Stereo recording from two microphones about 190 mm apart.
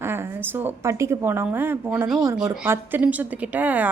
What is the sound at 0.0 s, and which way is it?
A woman's voice, 10° right (ahead or behind).